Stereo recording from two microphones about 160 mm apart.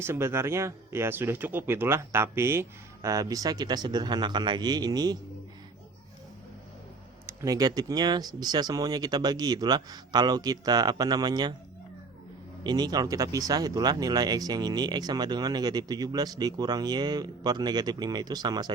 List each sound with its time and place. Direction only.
0.0 s speech: 15° right (ahead or behind)
7.3 s speech: 20° right (ahead or behind)
12.6 s speech: 25° right (ahead or behind)